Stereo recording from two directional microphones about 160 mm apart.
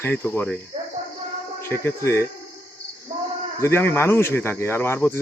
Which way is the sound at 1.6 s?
15° left (ahead or behind).